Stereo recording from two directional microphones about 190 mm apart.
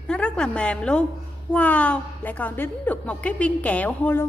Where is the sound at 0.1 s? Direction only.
5° left (ahead or behind).